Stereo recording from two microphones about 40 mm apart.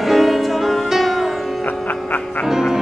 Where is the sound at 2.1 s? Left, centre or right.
Left.